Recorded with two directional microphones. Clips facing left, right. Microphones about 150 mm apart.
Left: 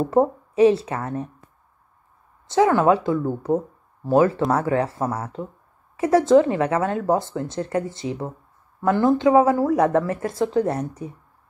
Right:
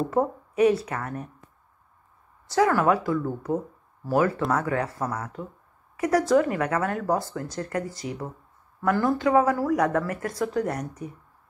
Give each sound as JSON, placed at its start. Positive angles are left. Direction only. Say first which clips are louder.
{"t": 0.1, "sound": "speech", "louder": "left 6 dB", "side_deg": 30}
{"t": 2.4, "sound": "speech", "louder": "left 4 dB", "side_deg": 25}